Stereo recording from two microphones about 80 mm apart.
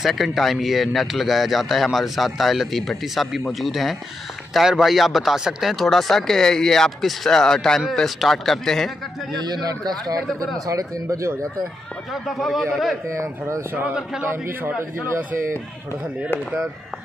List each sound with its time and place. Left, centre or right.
0.0 s speech: centre
9.4 s speech: right
12.1 s speech: centre
13.2 s speech: right
13.7 s a man's voice: centre
14.3 s a man's voice: right